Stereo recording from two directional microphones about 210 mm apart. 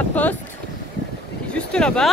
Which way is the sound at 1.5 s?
5° left (ahead or behind).